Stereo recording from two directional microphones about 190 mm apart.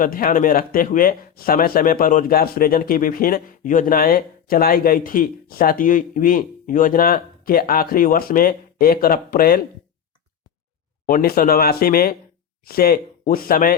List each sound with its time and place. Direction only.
0.0 s speech: 45° left (ahead or behind)
11.0 s speech: 50° left (ahead or behind)